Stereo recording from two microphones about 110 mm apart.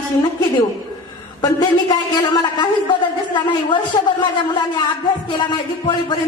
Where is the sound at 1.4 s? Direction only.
40° left (ahead or behind).